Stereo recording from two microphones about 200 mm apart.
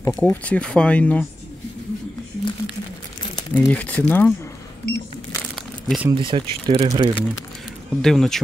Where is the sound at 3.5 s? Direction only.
10° left (ahead or behind).